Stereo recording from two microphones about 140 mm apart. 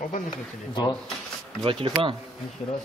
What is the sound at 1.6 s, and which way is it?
Speech, 40° right (ahead or behind).